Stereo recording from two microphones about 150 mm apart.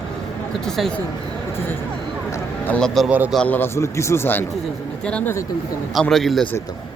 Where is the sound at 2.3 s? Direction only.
10° left (ahead or behind).